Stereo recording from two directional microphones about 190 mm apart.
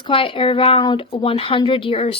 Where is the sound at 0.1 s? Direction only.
25° left (ahead or behind).